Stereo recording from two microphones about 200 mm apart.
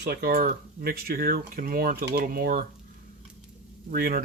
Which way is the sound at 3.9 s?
45° right (ahead or behind).